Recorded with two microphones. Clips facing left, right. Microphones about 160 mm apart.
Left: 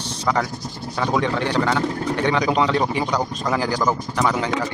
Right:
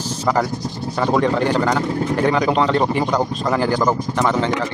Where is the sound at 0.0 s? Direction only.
35° left (ahead or behind).